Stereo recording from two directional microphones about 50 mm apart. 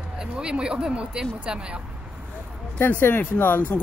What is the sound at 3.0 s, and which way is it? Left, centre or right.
Speech, left.